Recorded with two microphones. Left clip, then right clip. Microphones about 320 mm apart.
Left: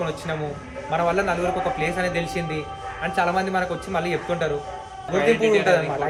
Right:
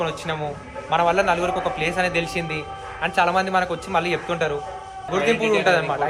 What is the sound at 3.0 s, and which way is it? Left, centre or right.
A man's voice, centre.